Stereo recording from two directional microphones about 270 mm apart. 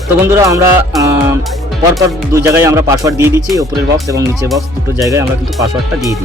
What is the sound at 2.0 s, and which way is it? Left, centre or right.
Speech, centre.